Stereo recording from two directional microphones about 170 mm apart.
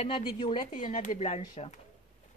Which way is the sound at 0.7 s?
50° left (ahead or behind).